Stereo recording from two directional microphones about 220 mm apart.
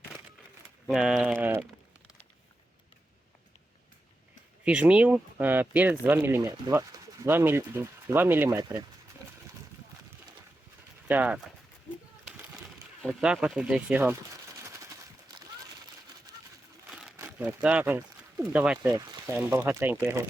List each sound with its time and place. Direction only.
0.9 s speech: centre (ahead or behind)
4.6 s speech: 5° right (ahead or behind)
11.1 s speech: 5° right (ahead or behind)
13.0 s speech: centre (ahead or behind)
14.6 s a sound: 15° right (ahead or behind)
16.3 s sewing machine: 15° right (ahead or behind)
16.9 s speech: 5° right (ahead or behind)